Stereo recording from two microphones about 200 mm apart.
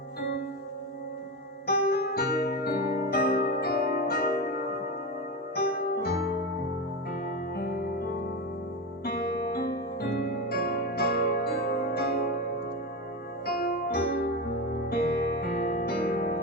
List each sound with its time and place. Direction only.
1.6 s keyboard: 50° left (ahead or behind)
7.3 s music: 50° left (ahead or behind)
9.0 s music: 50° left (ahead or behind)
13.4 s music: 50° left (ahead or behind)